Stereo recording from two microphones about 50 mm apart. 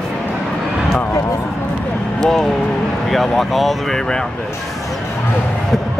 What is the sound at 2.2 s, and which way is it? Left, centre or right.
Speech, centre.